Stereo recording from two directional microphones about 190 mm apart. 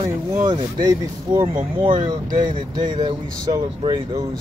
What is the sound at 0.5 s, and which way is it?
Speech, 25° right (ahead or behind).